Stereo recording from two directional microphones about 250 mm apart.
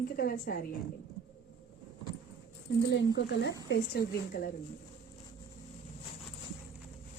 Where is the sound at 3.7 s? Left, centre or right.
Left.